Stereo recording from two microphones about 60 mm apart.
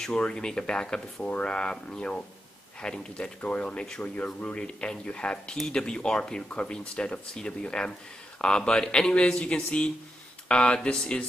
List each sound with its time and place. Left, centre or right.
0.0 s speech: centre